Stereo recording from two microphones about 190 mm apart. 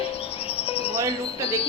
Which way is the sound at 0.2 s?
30° left (ahead or behind).